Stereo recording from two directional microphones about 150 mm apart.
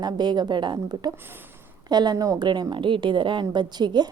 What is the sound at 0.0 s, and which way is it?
A woman's voice, 30° right (ahead or behind).